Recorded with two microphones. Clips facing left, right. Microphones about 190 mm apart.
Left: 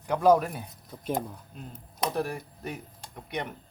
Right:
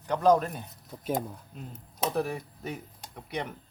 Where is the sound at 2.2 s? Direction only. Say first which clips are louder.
Right 1 dB; centre (ahead or behind).